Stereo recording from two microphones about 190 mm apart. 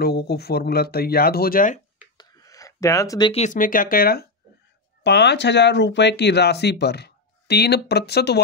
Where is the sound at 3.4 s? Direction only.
45° left (ahead or behind).